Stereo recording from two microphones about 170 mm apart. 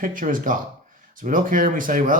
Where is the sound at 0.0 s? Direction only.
50° right (ahead or behind).